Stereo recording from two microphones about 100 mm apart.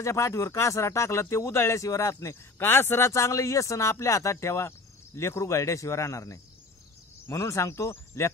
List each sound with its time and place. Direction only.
0.0 s speech: 30° left (ahead or behind)